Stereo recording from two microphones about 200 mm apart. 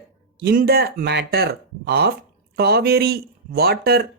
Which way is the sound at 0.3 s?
55° right (ahead or behind).